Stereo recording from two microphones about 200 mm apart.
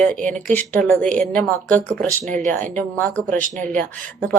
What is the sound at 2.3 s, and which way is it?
Speech, 40° right (ahead or behind).